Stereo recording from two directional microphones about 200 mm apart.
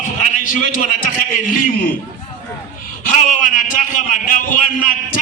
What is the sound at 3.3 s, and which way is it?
A man's voice, 40° left (ahead or behind).